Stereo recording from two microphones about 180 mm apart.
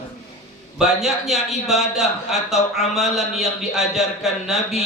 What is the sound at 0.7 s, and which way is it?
A man's voice, centre (ahead or behind).